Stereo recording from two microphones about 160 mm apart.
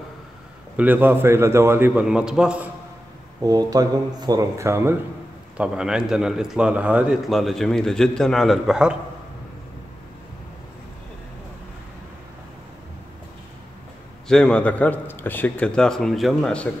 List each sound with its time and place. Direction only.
0.7 s a man's voice: 10° right (ahead or behind)
3.3 s speech: 20° right (ahead or behind)
5.6 s a man's voice: 5° right (ahead or behind)
14.2 s a man's voice: 5° left (ahead or behind)